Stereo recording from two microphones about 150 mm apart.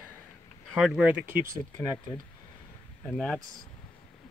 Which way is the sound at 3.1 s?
5° left (ahead or behind).